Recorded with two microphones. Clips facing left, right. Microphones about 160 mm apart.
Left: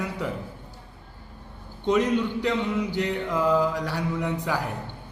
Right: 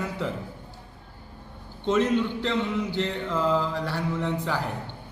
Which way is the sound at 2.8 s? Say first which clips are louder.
Left 1 dB; 15° left (ahead or behind).